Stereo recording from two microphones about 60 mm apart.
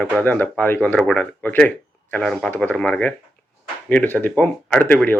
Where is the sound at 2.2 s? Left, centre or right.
Centre.